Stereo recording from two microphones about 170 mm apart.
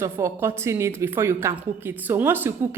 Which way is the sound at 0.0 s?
15° right (ahead or behind).